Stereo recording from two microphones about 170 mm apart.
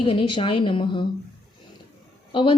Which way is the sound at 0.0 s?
30° left (ahead or behind).